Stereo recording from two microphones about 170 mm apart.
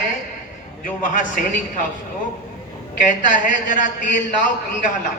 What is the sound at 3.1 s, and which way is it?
A man's voice, 50° left (ahead or behind).